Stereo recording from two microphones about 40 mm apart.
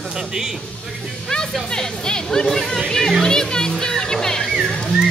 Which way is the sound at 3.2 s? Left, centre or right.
Centre.